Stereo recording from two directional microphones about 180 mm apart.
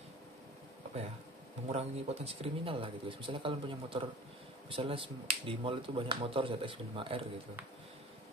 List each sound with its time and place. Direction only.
1.7 s speech: 35° right (ahead or behind)